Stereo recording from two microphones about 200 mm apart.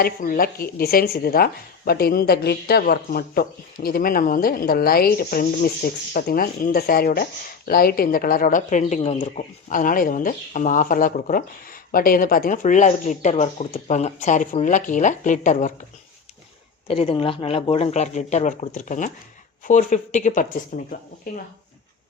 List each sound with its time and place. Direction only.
0.0 s speech: 45° left (ahead or behind)
16.9 s speech: 30° left (ahead or behind)